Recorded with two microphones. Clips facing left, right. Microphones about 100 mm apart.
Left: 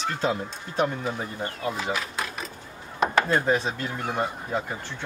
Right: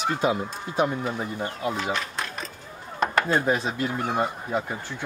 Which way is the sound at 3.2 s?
20° right (ahead or behind).